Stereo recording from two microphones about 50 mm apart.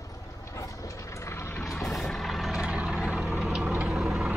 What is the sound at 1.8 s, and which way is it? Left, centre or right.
Vehicle, centre.